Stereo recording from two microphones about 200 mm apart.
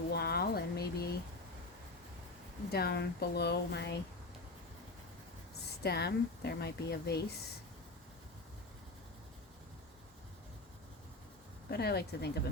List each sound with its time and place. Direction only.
0.1 s a sound: 50° left (ahead or behind)
2.7 s speech: 55° left (ahead or behind)
5.8 s speech: 55° left (ahead or behind)
11.7 s speech: 55° left (ahead or behind)